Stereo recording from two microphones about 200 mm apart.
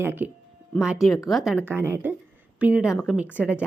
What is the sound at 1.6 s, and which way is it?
Speech, 10° right (ahead or behind).